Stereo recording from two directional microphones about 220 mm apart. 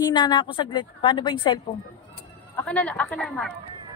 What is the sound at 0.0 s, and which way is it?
A woman's voice, 20° left (ahead or behind).